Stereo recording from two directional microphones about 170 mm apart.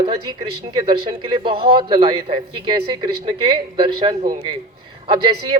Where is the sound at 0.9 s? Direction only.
30° right (ahead or behind).